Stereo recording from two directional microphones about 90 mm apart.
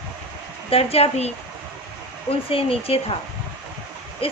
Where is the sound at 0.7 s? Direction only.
90° left.